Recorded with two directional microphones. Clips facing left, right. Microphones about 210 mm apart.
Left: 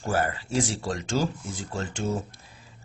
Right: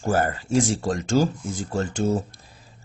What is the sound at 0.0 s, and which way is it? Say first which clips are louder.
Speech: right 4 dB; 45° right (ahead or behind).